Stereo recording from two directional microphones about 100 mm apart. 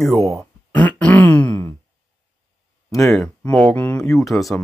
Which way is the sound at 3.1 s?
10° left (ahead or behind).